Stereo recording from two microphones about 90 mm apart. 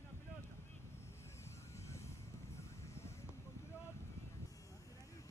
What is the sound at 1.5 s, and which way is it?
Vehicle, 30° left (ahead or behind).